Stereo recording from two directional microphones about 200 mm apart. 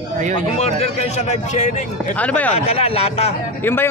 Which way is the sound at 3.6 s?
10° left (ahead or behind).